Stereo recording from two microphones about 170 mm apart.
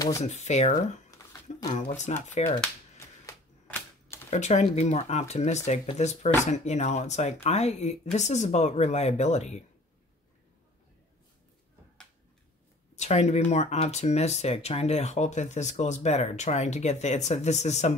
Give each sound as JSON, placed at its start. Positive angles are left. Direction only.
{"t": 0.2, "sound": "speech", "side_deg": 40}
{"t": 3.3, "sound": "typewriter", "side_deg": 15}
{"t": 4.3, "sound": "speech", "side_deg": 40}
{"t": 12.9, "sound": "speech", "side_deg": 40}